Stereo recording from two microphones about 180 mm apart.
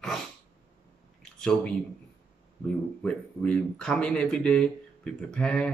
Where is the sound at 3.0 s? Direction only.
5° left (ahead or behind).